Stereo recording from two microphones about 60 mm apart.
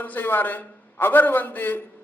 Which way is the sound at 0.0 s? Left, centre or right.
Left.